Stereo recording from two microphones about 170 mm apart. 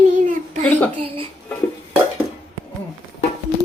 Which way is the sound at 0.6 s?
10° left (ahead or behind).